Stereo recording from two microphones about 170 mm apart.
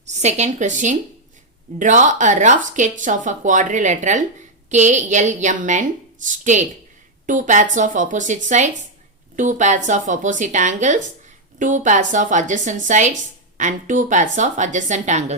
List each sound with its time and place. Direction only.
0.0 s speech: 40° right (ahead or behind)